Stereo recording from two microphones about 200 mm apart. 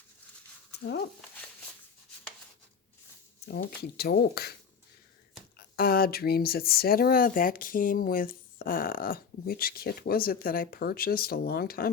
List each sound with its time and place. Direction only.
3.8 s speech: 55° left (ahead or behind)
5.5 s speech: 50° left (ahead or behind)